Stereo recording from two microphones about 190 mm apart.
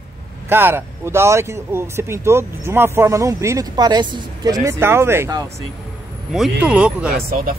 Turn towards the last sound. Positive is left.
turn(degrees=-50)  # may be behind; listen again after turning